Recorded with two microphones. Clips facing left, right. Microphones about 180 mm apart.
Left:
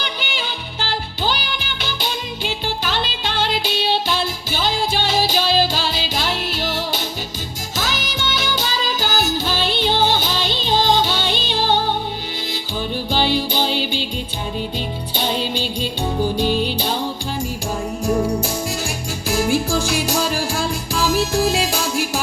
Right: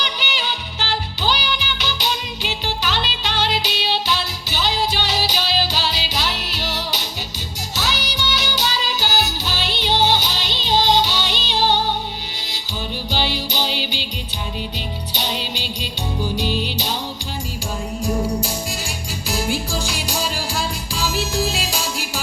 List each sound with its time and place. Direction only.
0.0 s music: 50° left (ahead or behind)
13.1 s music: 50° left (ahead or behind)
15.1 s music: 50° left (ahead or behind)
19.3 s music: 50° left (ahead or behind)